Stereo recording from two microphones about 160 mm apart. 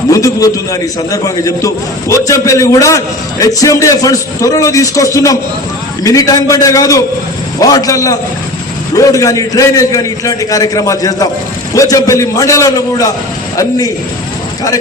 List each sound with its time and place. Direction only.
0.1 s a man's voice: 20° left (ahead or behind)